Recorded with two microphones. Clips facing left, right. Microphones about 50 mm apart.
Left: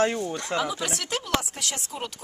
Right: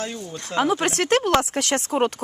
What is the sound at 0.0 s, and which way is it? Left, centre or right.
Speech, left.